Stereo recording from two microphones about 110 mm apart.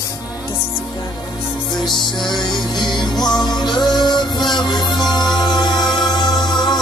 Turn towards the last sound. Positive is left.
turn(degrees=40)  # may be behind; listen again after turning